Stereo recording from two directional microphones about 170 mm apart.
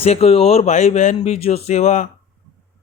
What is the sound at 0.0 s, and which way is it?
A man's voice, 35° left (ahead or behind).